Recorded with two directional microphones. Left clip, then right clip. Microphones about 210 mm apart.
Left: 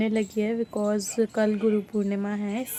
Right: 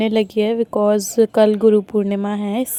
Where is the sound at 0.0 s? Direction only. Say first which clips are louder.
Right 9 dB; 45° right (ahead or behind).